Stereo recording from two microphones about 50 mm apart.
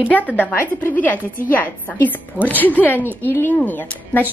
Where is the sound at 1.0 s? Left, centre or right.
Left.